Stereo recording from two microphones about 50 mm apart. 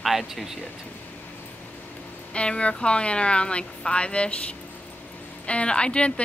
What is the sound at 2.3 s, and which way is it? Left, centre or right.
A woman's voice, left.